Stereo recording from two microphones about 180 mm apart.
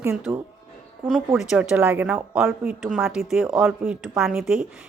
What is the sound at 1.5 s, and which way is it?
A woman's voice, 5° right (ahead or behind).